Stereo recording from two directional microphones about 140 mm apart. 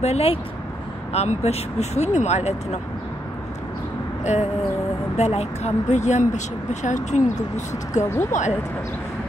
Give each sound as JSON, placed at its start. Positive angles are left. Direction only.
{"t": 0.0, "sound": "speech", "side_deg": 50}
{"t": 4.2, "sound": "a sound", "side_deg": 55}
{"t": 5.1, "sound": "speech", "side_deg": 50}
{"t": 8.0, "sound": "speech", "side_deg": 20}
{"t": 8.3, "sound": "speech", "side_deg": 60}